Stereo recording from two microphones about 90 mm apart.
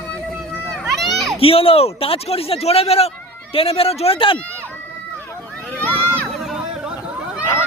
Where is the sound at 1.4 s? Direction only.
90° left.